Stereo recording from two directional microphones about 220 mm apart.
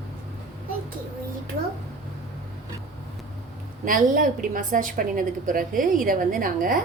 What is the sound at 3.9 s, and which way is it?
A woman's voice, 40° right (ahead or behind).